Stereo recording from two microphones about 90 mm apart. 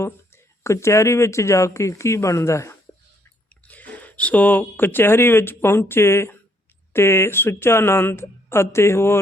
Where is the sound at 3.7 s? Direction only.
15° left (ahead or behind).